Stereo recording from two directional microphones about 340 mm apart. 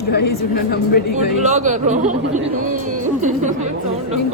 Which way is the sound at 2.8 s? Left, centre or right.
Right.